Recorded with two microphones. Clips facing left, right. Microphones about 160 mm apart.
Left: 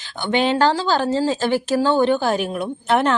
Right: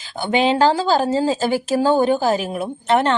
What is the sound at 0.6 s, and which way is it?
Speech, 40° right (ahead or behind).